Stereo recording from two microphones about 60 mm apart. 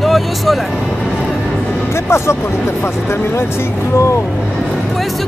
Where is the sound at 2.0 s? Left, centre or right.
Left.